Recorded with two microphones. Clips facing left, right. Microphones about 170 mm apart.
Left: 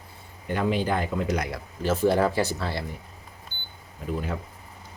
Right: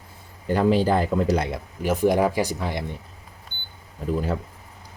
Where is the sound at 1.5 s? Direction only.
20° right (ahead or behind).